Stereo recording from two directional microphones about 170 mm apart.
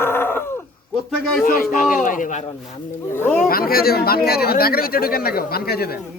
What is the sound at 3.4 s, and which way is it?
Speech, 60° left (ahead or behind).